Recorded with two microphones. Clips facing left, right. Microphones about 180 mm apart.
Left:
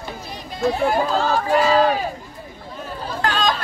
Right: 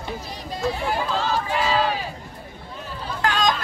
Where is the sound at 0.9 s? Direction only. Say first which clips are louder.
Left 5 dB; 45° left (ahead or behind).